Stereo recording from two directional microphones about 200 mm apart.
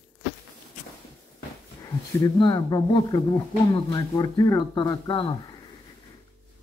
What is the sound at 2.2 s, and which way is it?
Speech, 15° left (ahead or behind).